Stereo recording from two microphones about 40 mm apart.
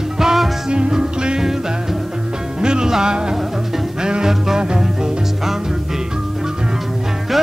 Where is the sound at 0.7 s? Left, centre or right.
Right.